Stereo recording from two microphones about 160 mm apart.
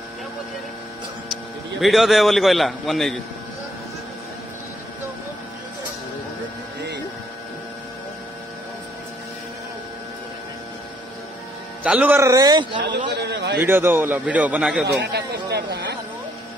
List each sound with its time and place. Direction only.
1.8 s a man's voice: centre (ahead or behind)
11.8 s a man's voice: 10° right (ahead or behind); by 12.8 s 25° right (ahead or behind)
13.1 s a sound: 90° right
13.6 s a man's voice: 15° right (ahead or behind)
14.9 s a man's voice: 90° right